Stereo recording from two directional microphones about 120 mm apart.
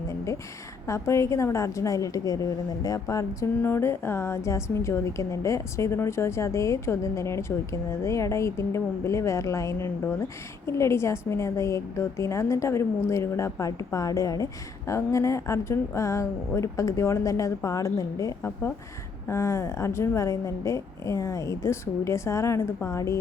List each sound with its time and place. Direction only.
0.9 s a woman's voice: 25° left (ahead or behind)